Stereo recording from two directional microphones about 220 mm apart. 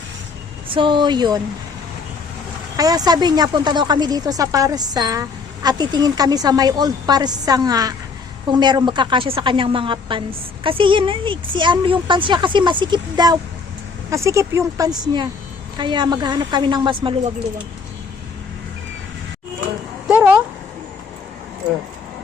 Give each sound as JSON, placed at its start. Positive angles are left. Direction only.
{"t": 0.7, "sound": "a woman's voice", "side_deg": -20}
{"t": 2.7, "sound": "a woman's voice", "side_deg": -15}
{"t": 20.1, "sound": "a sound", "side_deg": -5}